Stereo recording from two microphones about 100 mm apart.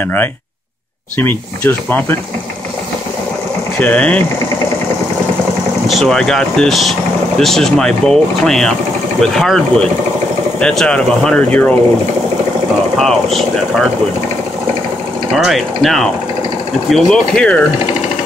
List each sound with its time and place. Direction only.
1.1 s speech: 20° left (ahead or behind)
3.8 s speech: 15° left (ahead or behind)
5.9 s speech: centre (ahead or behind)
12.9 s speech: 5° left (ahead or behind)
15.3 s speech: centre (ahead or behind)